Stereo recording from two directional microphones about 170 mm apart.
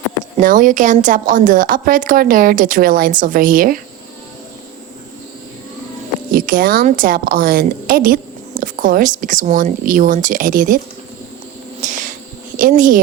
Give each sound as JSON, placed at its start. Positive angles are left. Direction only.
{"t": 0.3, "sound": "a woman's voice", "side_deg": -50}
{"t": 6.3, "sound": "a woman's voice", "side_deg": -55}
{"t": 11.8, "sound": "a sound", "side_deg": -50}
{"t": 12.5, "sound": "speech", "side_deg": -50}